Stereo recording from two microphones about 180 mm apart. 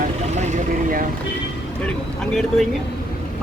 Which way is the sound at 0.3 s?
45° right (ahead or behind).